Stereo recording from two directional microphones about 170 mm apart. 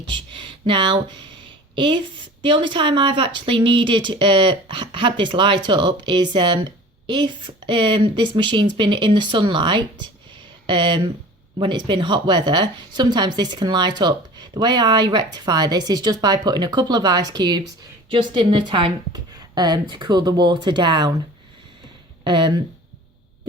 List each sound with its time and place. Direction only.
0.1 s speech: 30° right (ahead or behind)
22.2 s speech: 25° right (ahead or behind)